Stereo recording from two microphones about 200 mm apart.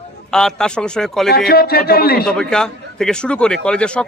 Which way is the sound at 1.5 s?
50° left (ahead or behind).